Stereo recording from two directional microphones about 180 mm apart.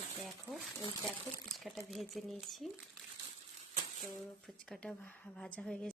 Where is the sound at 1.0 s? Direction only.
Centre (ahead or behind).